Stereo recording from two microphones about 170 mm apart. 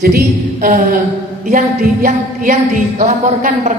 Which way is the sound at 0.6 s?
55° right (ahead or behind).